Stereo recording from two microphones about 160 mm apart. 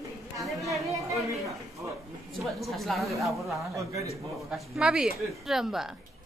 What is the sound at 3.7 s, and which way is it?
Speech, 20° right (ahead or behind).